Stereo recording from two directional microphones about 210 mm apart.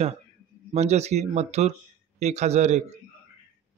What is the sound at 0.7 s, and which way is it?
Speech, 30° right (ahead or behind).